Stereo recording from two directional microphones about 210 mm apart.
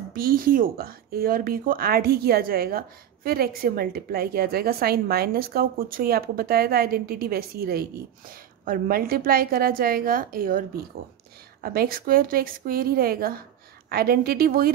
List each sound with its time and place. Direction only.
0.1 s a woman's voice: 45° right (ahead or behind)